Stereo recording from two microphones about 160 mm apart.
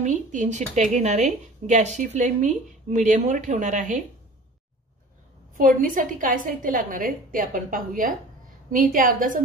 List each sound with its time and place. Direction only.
0.0 s a woman's voice: 50° right (ahead or behind)
5.6 s a woman's voice: 60° right (ahead or behind)